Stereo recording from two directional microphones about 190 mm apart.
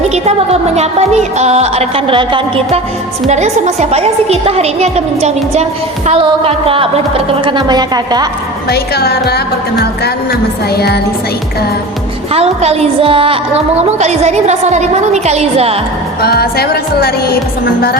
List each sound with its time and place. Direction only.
0.8 s a woman's voice: 35° right (ahead or behind)
8.7 s speech: 55° left (ahead or behind)
12.3 s a woman's voice: 30° right (ahead or behind)
16.2 s music: 55° left (ahead or behind)